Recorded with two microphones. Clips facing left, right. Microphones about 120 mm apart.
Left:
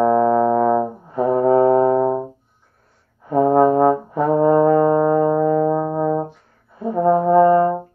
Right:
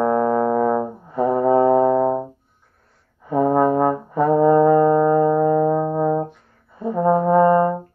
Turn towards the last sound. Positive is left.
turn(degrees=0)  # may be behind; listen again after turning